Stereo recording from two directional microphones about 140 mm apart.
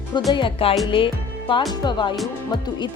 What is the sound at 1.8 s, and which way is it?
Speech, 30° left (ahead or behind).